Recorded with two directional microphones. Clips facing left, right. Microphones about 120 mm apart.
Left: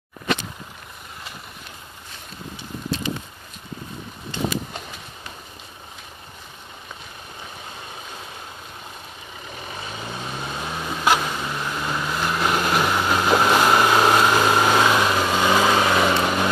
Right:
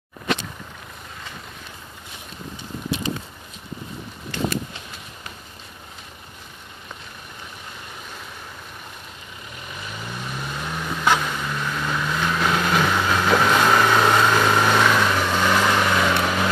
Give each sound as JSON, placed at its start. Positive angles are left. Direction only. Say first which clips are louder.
{"t": 4.3, "sound": "a sound", "louder": "even", "side_deg": 20}
{"t": 9.9, "sound": "vehicle", "louder": "even", "side_deg": 20}
{"t": 10.6, "sound": "vehicle", "louder": "even", "side_deg": 15}